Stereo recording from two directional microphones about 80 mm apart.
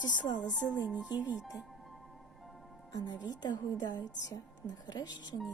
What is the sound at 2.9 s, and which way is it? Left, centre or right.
Speech, left.